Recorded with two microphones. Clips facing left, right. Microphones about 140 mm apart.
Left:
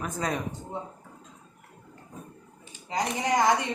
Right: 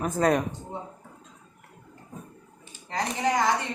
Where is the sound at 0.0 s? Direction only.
60° right (ahead or behind).